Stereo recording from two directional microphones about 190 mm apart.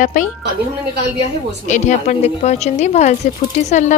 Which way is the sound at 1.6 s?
40° left (ahead or behind).